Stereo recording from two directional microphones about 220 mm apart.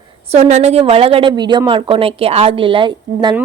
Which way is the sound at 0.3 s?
30° right (ahead or behind).